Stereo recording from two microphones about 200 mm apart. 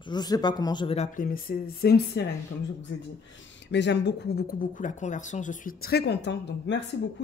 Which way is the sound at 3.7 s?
60° left (ahead or behind).